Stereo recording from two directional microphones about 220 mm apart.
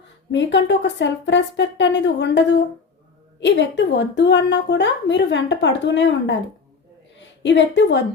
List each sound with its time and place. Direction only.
0.3 s a woman's voice: 55° left (ahead or behind)